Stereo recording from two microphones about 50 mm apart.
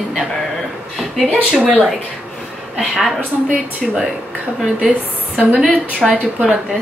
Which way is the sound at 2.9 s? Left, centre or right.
Centre.